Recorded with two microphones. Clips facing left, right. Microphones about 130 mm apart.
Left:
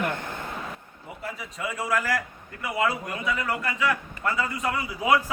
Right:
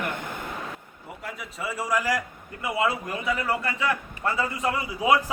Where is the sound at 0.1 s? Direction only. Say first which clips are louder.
Left 1 dB; 15° right (ahead or behind).